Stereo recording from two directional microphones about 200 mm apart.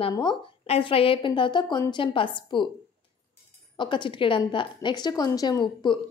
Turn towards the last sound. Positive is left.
turn(degrees=20)  # may be behind; listen again after turning